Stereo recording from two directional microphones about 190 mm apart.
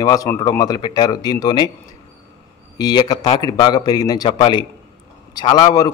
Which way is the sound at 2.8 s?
20° left (ahead or behind).